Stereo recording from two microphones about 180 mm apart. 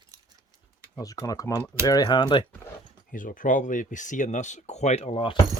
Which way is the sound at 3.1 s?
50° left (ahead or behind).